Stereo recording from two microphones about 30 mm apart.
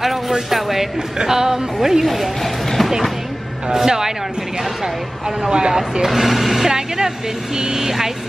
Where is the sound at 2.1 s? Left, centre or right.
Centre.